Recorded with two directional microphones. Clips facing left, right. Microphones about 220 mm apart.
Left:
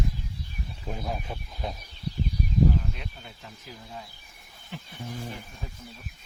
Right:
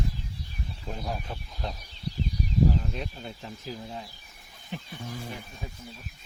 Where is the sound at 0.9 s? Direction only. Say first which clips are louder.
Left 1 dB; 10° left (ahead or behind).